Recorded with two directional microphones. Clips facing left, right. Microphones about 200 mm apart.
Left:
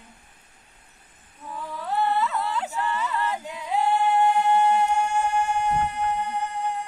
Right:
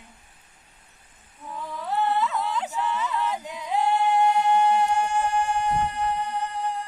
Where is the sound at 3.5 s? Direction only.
5° left (ahead or behind).